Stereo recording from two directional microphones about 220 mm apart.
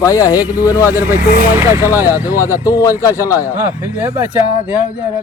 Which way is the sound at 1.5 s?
10° right (ahead or behind).